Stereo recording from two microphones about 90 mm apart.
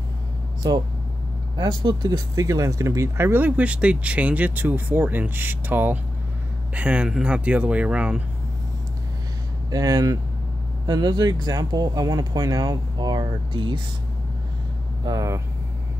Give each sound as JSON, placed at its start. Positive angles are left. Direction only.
{"t": 1.6, "sound": "speech", "side_deg": -60}
{"t": 2.0, "sound": "speech", "side_deg": -40}
{"t": 9.7, "sound": "speech", "side_deg": -40}
{"t": 15.0, "sound": "speech", "side_deg": -35}